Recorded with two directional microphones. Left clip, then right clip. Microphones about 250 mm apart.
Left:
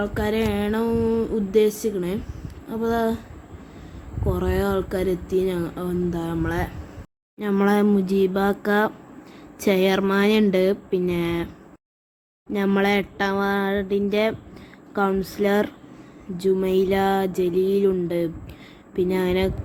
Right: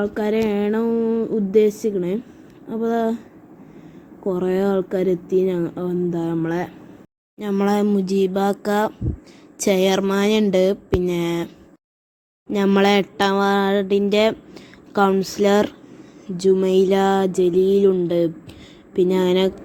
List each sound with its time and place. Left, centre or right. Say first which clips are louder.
0.0 s speech: right 3 dB; centre
4.3 s speech: right 3 dB; centre
12.5 s speech: right 4 dB; centre